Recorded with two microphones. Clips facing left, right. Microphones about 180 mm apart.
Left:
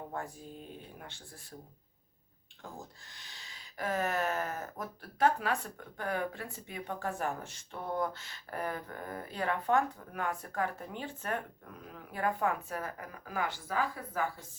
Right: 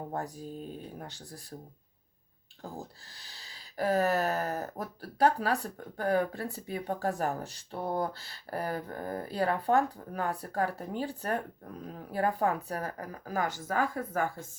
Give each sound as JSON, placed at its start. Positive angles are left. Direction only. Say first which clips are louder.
{"t": 0.1, "sound": "speech", "louder": "right 5 dB", "side_deg": -40}
{"t": 2.6, "sound": "speech", "louder": "right 5 dB", "side_deg": -35}